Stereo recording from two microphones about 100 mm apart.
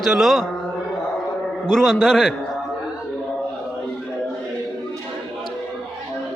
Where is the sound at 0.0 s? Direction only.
Centre (ahead or behind).